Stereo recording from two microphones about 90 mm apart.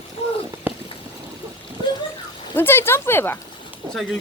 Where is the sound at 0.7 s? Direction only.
20° right (ahead or behind).